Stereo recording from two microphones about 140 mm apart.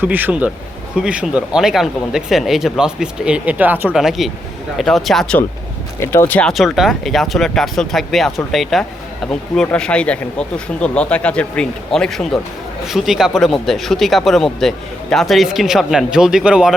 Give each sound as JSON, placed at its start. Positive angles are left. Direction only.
{"t": 0.0, "sound": "speech", "side_deg": -15}
{"t": 6.0, "sound": "speech", "side_deg": 20}
{"t": 6.5, "sound": "speech", "side_deg": 0}